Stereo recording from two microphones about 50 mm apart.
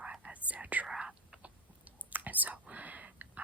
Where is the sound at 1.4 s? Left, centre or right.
Right.